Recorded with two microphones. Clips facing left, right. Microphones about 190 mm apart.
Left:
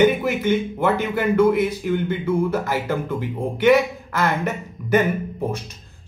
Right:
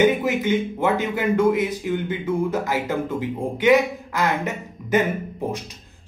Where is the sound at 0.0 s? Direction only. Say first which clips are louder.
Left 1 dB; 15° right (ahead or behind).